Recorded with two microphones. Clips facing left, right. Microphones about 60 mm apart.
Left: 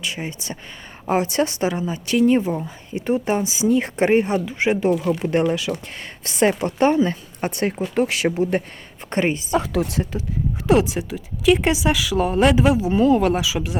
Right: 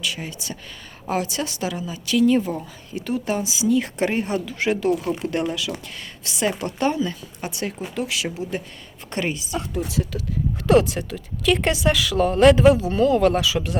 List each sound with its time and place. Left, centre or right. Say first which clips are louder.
0.0 s a woman's voice: left 1 dB; left
9.0 s speech: left 5 dB; left
10.7 s speech: even; centre